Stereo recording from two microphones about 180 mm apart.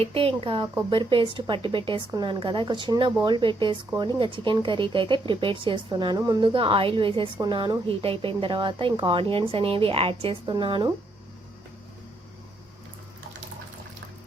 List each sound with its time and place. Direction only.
0.0 s speech: 30° right (ahead or behind)